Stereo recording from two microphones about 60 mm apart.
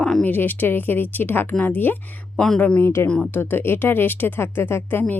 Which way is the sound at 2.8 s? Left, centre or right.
Left.